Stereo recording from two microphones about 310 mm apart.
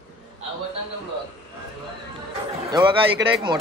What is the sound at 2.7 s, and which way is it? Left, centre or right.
Speech, centre.